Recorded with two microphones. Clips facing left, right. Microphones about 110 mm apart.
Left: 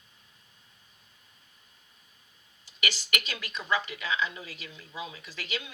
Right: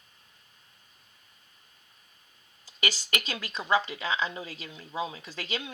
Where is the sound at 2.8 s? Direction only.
35° right (ahead or behind).